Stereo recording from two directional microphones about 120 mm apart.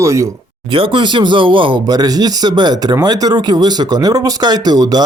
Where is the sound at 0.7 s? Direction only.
45° right (ahead or behind).